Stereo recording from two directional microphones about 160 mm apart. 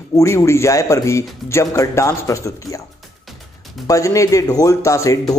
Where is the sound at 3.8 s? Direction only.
20° left (ahead or behind).